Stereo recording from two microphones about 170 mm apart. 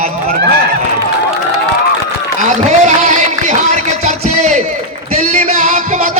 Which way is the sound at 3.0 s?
45° right (ahead or behind).